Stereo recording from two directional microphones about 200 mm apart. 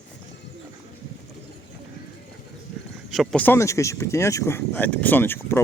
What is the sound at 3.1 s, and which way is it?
Speech, 5° left (ahead or behind).